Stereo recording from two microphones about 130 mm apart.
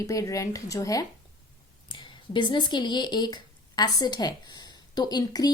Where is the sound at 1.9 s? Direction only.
40° left (ahead or behind).